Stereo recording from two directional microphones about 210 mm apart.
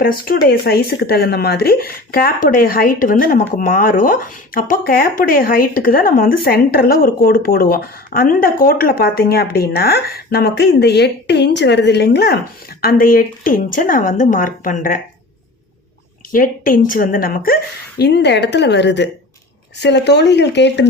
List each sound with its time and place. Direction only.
0.0 s speech: 45° left (ahead or behind)
16.3 s speech: 40° left (ahead or behind)